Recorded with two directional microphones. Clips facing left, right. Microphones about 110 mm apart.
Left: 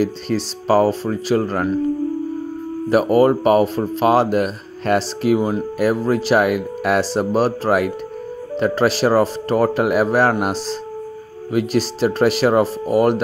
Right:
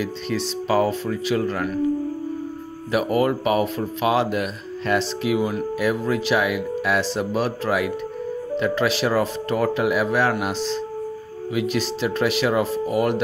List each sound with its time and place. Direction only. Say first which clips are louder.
0.0 s speech: left 5 dB; 40° left (ahead or behind)
2.9 s speech: left 6 dB; 40° left (ahead or behind)